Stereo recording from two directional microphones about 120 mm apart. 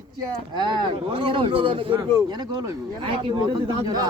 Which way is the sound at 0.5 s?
40° right (ahead or behind).